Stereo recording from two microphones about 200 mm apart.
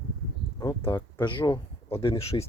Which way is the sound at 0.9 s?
20° left (ahead or behind).